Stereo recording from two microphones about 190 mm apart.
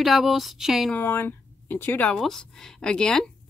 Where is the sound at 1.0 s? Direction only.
10° left (ahead or behind).